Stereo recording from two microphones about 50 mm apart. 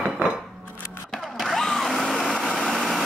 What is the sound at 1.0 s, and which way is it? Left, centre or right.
Blender, centre.